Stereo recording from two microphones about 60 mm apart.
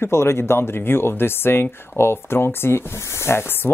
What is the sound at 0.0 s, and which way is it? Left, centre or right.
Speech, left.